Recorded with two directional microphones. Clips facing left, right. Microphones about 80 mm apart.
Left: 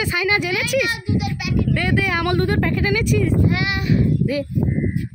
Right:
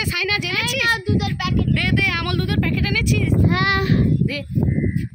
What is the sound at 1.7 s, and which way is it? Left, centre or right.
Speech, left.